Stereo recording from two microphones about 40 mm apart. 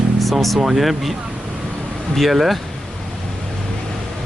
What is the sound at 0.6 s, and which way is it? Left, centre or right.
Speech, centre.